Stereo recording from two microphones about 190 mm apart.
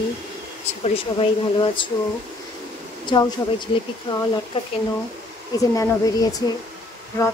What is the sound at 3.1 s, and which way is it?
Speech, 20° left (ahead or behind).